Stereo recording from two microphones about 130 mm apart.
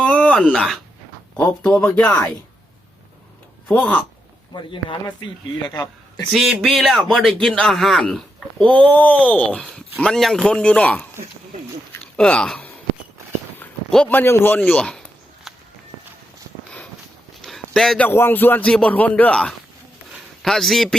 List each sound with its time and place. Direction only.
0.0 s a sound: 10° left (ahead or behind)
1.4 s speech: 10° left (ahead or behind)
3.7 s speech: 15° left (ahead or behind)
4.5 s speech: 35° left (ahead or behind)
6.3 s a man's voice: 5° right (ahead or behind)
12.1 s speech: 5° left (ahead or behind)
13.9 s speech: 10° left (ahead or behind)
14.7 s speech: 5° left (ahead or behind)
17.4 s a sound: centre (ahead or behind)
18.1 s a man's voice: 15° left (ahead or behind)